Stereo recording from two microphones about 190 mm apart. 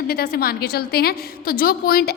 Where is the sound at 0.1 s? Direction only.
50° left (ahead or behind).